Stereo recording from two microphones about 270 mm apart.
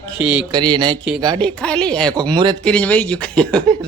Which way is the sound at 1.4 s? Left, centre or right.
Centre.